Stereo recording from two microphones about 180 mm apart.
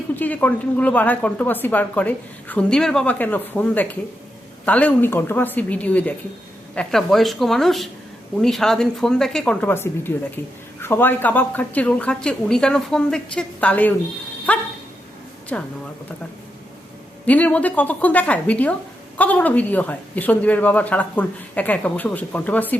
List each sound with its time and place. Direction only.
0.2 s speech: 10° left (ahead or behind)
17.2 s speech: 10° left (ahead or behind)